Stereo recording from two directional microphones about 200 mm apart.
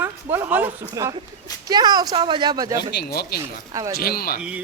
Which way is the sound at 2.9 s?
50° left (ahead or behind).